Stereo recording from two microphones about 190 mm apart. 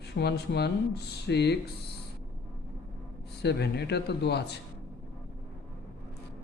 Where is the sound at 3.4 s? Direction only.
60° left (ahead or behind).